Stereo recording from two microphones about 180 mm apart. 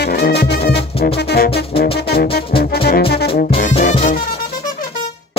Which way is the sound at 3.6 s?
45° left (ahead or behind).